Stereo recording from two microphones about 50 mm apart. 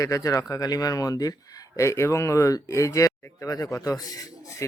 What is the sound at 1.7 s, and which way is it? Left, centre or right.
Speech, left.